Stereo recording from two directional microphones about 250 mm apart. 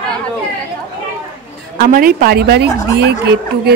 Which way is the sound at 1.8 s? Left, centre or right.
Right.